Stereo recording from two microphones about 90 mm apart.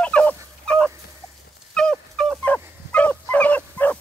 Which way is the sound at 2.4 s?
15° left (ahead or behind).